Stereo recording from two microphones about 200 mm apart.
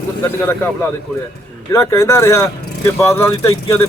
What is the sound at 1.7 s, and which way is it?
A man's voice, 15° left (ahead or behind).